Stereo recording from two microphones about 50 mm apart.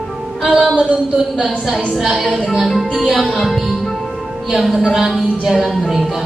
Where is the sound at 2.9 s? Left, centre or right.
Centre.